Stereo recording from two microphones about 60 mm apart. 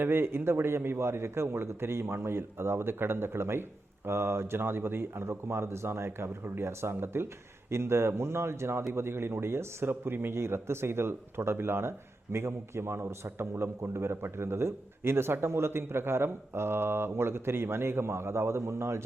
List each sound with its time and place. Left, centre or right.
0.0 s a man's voice: right